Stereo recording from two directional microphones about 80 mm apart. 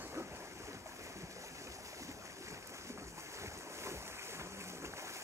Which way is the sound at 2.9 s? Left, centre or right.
Right.